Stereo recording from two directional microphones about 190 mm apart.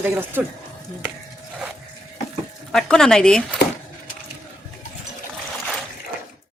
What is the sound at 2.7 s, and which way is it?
Speech, 5° left (ahead or behind).